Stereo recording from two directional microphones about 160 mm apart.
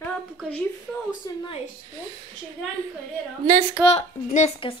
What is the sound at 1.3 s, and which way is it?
Speech, 25° left (ahead or behind).